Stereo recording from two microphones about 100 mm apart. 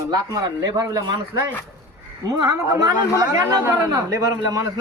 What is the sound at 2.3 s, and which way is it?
Speech, 35° right (ahead or behind).